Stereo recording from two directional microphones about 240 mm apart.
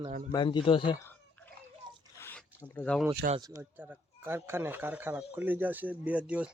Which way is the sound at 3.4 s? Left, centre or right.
Centre.